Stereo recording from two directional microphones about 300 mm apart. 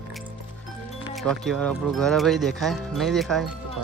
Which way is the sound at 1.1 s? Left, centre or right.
Centre.